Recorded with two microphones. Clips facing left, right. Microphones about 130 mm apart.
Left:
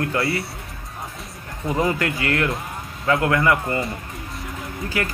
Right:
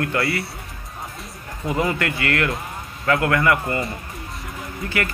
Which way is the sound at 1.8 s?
20° left (ahead or behind).